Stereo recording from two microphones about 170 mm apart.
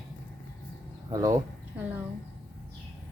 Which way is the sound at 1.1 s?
20° right (ahead or behind).